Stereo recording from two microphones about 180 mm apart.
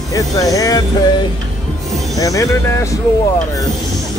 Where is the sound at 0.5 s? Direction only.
20° left (ahead or behind).